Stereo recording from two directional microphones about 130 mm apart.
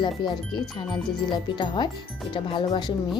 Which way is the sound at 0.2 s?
35° left (ahead or behind).